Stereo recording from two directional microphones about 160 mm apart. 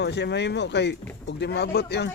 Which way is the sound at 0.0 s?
90° left.